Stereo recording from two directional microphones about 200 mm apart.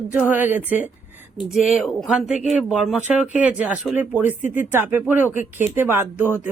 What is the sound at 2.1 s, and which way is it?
Speech, 5° right (ahead or behind).